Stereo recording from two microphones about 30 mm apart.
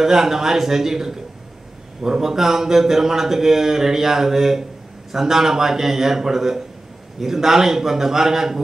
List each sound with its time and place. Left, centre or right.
0.0 s a man's voice: centre